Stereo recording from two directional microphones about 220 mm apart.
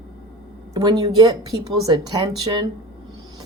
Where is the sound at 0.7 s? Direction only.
20° right (ahead or behind).